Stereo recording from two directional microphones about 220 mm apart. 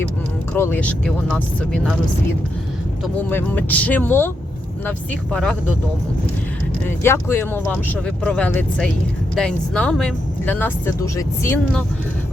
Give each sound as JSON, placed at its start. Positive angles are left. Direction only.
{"t": 0.5, "sound": "speech", "side_deg": 10}
{"t": 3.2, "sound": "speech", "side_deg": 10}
{"t": 6.8, "sound": "speech", "side_deg": 10}